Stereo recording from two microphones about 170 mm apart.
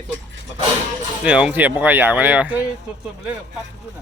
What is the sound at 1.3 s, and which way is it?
Speech, 5° right (ahead or behind).